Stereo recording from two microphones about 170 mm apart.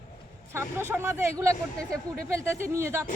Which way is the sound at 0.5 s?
15° right (ahead or behind).